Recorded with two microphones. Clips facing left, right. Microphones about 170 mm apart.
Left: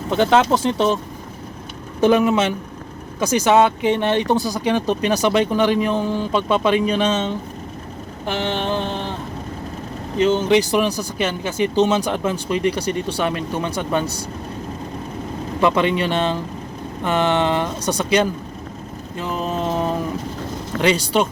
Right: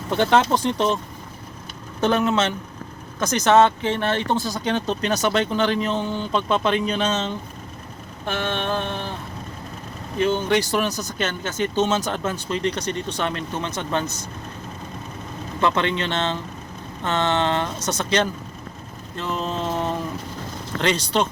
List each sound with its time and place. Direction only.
0.2 s speech: 5° left (ahead or behind)
2.0 s speech: 10° left (ahead or behind)
10.2 s speech: 15° left (ahead or behind)
14.0 s speech: 35° left (ahead or behind)
15.6 s speech: 10° left (ahead or behind)
19.1 s mantra: 10° left (ahead or behind)
20.8 s speech: 10° left (ahead or behind)